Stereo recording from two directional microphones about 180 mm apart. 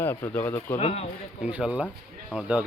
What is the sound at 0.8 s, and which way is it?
Speech, 35° left (ahead or behind).